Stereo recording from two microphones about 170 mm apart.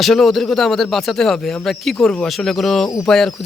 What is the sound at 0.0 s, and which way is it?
Speech, centre (ahead or behind).